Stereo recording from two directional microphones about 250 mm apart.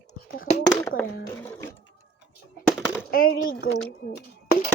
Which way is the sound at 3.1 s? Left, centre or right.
Left.